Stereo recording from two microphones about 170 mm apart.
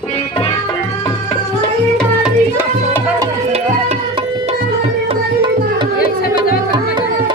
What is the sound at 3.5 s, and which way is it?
Tabla, 35° right (ahead or behind).